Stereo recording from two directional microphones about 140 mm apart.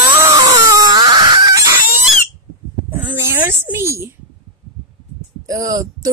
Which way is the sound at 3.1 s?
15° right (ahead or behind).